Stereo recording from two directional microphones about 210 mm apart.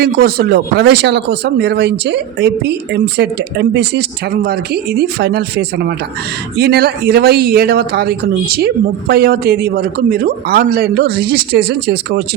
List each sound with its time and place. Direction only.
0.0 s speech: 45° right (ahead or behind)